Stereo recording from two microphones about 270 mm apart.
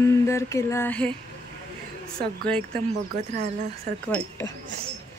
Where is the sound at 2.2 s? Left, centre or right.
Centre.